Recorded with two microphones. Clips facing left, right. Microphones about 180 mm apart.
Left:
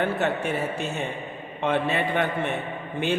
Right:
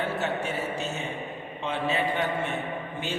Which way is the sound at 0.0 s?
60° left (ahead or behind).